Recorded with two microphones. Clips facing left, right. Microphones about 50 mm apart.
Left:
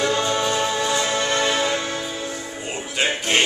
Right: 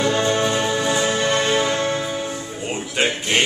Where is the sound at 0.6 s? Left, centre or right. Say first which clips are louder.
Right 2 dB; centre.